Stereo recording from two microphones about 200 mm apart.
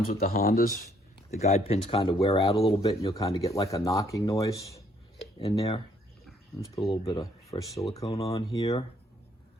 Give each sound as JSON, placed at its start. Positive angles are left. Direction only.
{"t": 0.0, "sound": "speech", "side_deg": 45}
{"t": 1.3, "sound": "speech", "side_deg": 35}
{"t": 5.1, "sound": "speech", "side_deg": 25}
{"t": 6.9, "sound": "speech", "side_deg": 25}